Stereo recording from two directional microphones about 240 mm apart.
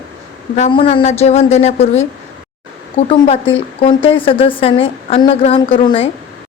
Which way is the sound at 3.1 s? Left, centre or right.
Left.